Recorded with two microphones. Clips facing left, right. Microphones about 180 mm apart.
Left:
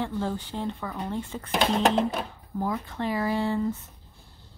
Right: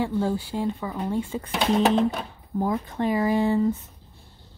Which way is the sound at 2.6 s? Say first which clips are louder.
Right 4 dB; 20° right (ahead or behind).